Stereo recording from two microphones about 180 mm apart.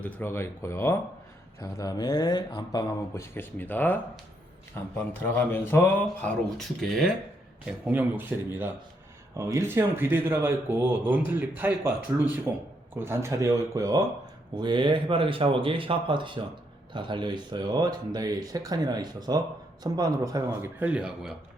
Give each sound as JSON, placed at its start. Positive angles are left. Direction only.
{"t": 0.0, "sound": "speech", "side_deg": 10}
{"t": 5.2, "sound": "speech", "side_deg": 10}
{"t": 7.9, "sound": "speech", "side_deg": -10}